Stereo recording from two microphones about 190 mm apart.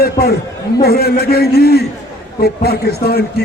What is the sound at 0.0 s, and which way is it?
A man's voice, 55° left (ahead or behind).